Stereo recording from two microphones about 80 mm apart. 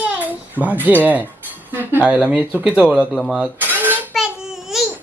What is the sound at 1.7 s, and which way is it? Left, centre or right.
Speech, right.